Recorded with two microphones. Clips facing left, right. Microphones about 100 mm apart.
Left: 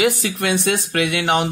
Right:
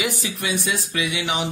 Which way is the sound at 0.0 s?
70° left (ahead or behind).